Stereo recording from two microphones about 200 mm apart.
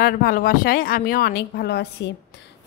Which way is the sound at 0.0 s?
45° left (ahead or behind).